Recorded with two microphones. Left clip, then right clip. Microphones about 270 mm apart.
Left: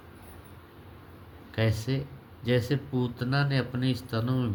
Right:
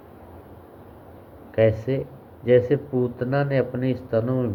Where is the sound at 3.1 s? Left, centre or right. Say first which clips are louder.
Right 7 dB; left.